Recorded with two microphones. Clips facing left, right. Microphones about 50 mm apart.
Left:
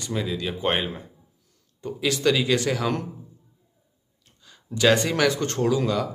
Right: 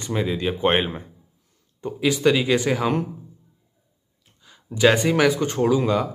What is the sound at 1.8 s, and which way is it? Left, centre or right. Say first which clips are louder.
Speech: right 3 dB; centre.